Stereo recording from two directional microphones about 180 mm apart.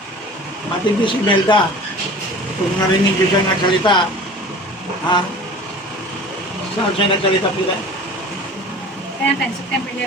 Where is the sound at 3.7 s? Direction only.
25° left (ahead or behind).